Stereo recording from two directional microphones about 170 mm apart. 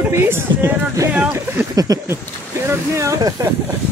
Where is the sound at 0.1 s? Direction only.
15° right (ahead or behind).